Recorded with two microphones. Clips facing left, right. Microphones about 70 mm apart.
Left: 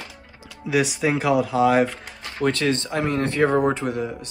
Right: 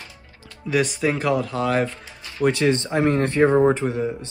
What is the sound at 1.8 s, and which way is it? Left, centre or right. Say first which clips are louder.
Speech: left 3 dB; left.